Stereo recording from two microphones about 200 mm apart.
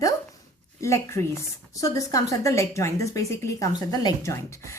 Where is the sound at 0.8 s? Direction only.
15° left (ahead or behind).